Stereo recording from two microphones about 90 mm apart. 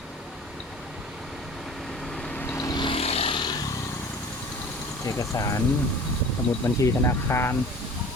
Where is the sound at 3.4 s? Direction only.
50° left (ahead or behind).